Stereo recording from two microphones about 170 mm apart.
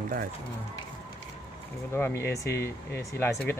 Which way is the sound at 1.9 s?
10° left (ahead or behind).